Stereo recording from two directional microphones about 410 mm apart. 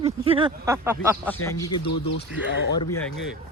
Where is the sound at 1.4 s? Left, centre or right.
Centre.